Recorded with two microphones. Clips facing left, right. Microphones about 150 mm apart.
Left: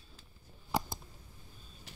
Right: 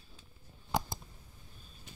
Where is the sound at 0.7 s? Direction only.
Centre (ahead or behind).